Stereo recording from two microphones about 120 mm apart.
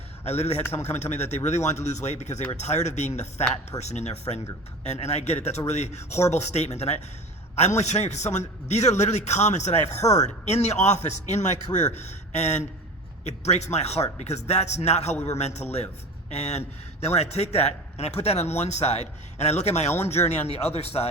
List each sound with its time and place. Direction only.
0.3 s a man's voice: 65° left (ahead or behind)